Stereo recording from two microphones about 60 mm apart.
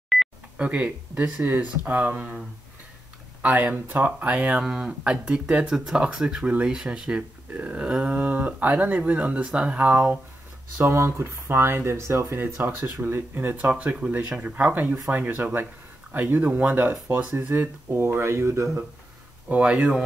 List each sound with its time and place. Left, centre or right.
0.1 s a sound: centre
0.6 s speech: right
3.4 s speech: right
4.6 s speech: centre
8.1 s speech: right
10.8 s speech: right
12.6 s speech: right
19.5 s speech: right